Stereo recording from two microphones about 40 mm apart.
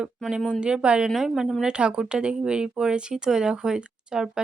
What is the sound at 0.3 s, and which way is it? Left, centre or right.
Speech, centre.